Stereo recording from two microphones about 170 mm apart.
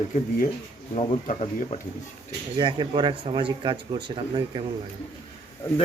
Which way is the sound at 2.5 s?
25° right (ahead or behind).